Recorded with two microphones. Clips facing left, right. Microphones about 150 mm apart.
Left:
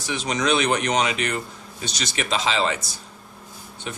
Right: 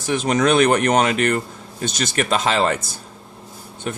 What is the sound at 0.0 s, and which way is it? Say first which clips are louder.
Speech: right 7 dB; 50° right (ahead or behind).